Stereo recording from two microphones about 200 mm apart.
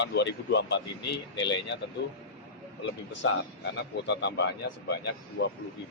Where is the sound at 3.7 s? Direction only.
60° left (ahead or behind).